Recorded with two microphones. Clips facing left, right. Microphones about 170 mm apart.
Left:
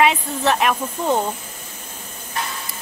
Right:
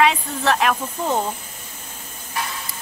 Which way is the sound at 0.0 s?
Centre (ahead or behind).